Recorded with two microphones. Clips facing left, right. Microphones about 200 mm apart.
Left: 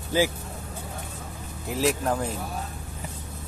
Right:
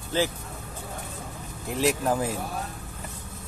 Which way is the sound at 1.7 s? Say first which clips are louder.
Even; centre (ahead or behind).